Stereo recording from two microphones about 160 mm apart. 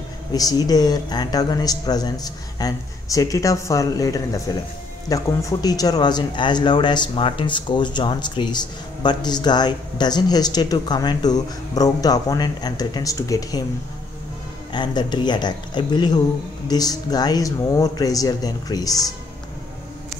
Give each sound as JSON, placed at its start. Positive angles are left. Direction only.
{"t": 0.3, "sound": "speech", "side_deg": 25}
{"t": 14.7, "sound": "speech", "side_deg": 30}